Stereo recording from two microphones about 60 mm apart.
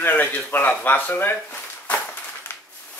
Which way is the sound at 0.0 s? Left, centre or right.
Left.